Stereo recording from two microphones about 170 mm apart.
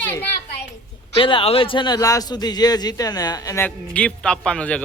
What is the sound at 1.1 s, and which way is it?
Speech, 30° left (ahead or behind).